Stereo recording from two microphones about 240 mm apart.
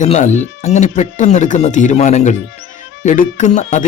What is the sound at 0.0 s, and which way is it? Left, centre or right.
Speech, left.